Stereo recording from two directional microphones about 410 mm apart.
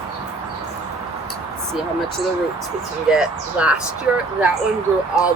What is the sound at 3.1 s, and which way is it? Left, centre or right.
Speech, centre.